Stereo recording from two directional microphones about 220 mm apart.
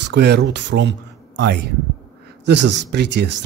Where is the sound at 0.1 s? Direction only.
50° right (ahead or behind).